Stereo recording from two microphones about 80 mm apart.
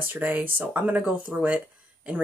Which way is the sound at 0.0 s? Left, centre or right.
Right.